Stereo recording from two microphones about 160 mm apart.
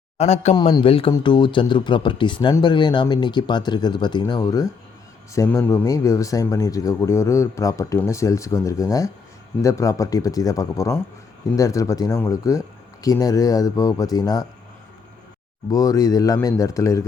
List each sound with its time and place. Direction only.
0.2 s speech: 45° left (ahead or behind)
0.5 s speech: 30° left (ahead or behind)
15.7 s speech: 20° left (ahead or behind)